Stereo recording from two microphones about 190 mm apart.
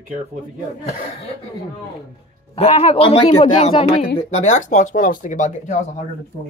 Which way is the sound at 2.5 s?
30° left (ahead or behind).